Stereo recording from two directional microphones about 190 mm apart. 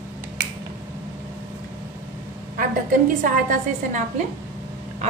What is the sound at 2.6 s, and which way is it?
A woman's voice, 45° right (ahead or behind).